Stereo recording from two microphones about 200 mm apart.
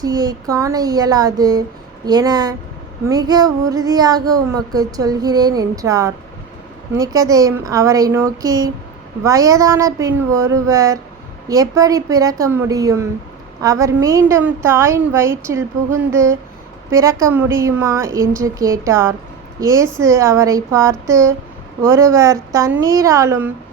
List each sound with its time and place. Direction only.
0.0 s child singing: 20° right (ahead or behind)
6.9 s a woman's voice: 15° right (ahead or behind)